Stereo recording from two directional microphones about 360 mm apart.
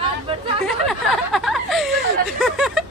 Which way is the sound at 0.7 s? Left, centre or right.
Centre.